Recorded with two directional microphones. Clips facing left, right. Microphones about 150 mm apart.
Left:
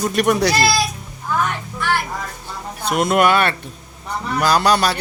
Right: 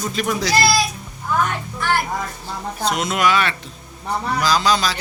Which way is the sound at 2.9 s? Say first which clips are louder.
Left 4 dB; 55° left (ahead or behind).